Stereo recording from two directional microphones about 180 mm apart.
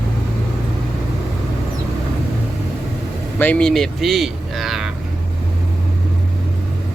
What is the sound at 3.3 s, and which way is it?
Speech, 10° left (ahead or behind).